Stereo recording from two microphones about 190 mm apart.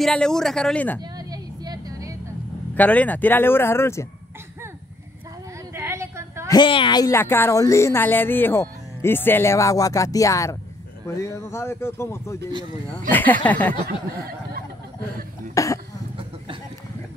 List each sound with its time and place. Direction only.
0.0 s speech: 5° left (ahead or behind)
1.1 s vehicle: 20° right (ahead or behind)
2.7 s speech: 10° left (ahead or behind)
5.8 s a sound: 15° right (ahead or behind)
6.5 s speech: 25° left (ahead or behind); by 13.7 s 10° left (ahead or behind)
15.5 s cough: 15° left (ahead or behind)